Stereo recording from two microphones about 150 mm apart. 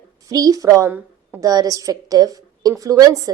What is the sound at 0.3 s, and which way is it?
A woman's voice, 25° right (ahead or behind).